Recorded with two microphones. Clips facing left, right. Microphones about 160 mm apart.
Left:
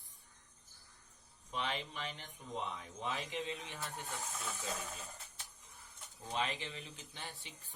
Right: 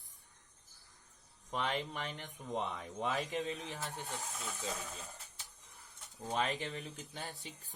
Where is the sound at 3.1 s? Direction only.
40° right (ahead or behind).